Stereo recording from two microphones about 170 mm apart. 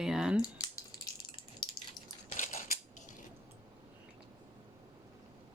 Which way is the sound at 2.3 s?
45° left (ahead or behind).